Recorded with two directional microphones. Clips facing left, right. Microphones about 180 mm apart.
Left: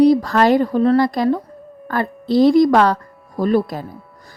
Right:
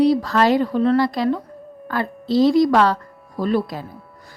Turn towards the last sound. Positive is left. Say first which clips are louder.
# left 4 dB
turn(degrees=45)  # may be behind; listen again after turning